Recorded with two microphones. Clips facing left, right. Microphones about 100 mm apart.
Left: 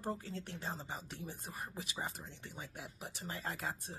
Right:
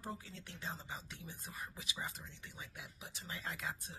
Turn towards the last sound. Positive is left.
turn(degrees=40)  # may be behind; listen again after turning